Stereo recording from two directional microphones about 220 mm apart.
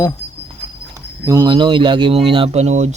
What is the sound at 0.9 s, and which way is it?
Speech, 15° right (ahead or behind).